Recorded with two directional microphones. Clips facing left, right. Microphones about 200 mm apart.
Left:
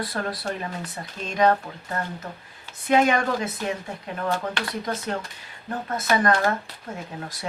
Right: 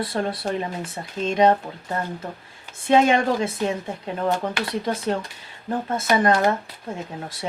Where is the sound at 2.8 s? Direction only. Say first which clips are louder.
Right 3 dB; 25° right (ahead or behind).